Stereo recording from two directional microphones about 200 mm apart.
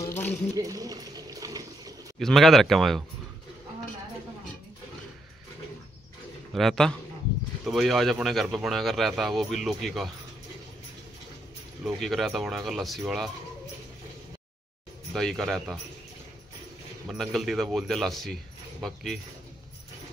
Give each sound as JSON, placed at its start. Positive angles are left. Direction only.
{"t": 0.0, "sound": "a sound", "side_deg": 10}
{"t": 0.6, "sound": "a sound", "side_deg": -15}
{"t": 2.1, "sound": "speech", "side_deg": 0}
{"t": 6.5, "sound": "speech", "side_deg": 0}
{"t": 11.8, "sound": "speech", "side_deg": 0}
{"t": 15.1, "sound": "speech", "side_deg": 0}
{"t": 17.1, "sound": "speech", "side_deg": 0}